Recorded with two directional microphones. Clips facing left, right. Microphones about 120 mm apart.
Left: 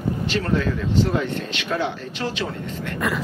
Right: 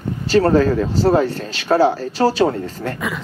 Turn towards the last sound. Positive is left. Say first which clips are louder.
# left 1 dB
turn(degrees=0)  # may be behind; listen again after turning